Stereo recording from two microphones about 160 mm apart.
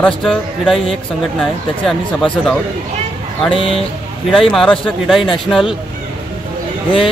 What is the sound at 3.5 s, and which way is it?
Speech, 35° left (ahead or behind).